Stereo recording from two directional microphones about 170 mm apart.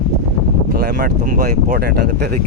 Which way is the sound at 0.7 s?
70° right (ahead or behind).